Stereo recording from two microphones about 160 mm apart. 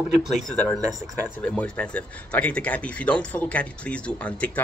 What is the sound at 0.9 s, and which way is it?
Speech, 20° right (ahead or behind).